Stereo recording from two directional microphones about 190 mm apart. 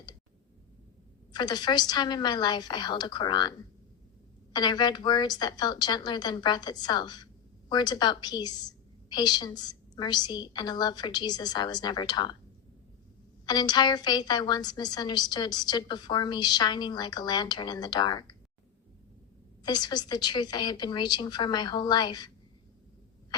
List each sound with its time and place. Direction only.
1.3 s a woman's voice: 20° left (ahead or behind)
4.5 s a woman's voice: 20° left (ahead or behind)
13.4 s a woman's voice: 20° left (ahead or behind)
19.6 s a woman's voice: 20° left (ahead or behind)